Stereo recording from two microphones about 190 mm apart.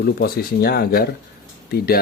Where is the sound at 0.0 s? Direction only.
55° left (ahead or behind).